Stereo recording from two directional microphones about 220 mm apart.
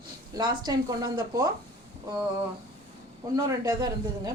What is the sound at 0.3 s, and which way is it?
A woman's voice, 20° right (ahead or behind).